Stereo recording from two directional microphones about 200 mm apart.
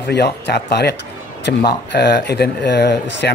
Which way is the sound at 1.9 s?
55° left (ahead or behind).